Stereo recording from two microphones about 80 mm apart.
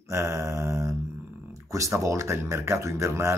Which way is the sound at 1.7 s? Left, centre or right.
Right.